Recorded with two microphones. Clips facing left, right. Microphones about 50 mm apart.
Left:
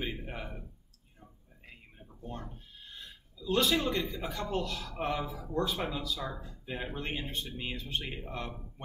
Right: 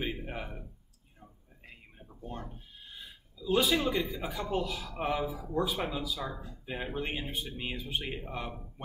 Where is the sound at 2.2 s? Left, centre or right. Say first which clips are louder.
Right 1 dB; centre.